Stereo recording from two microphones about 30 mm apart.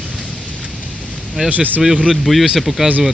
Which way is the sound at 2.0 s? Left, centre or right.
Centre.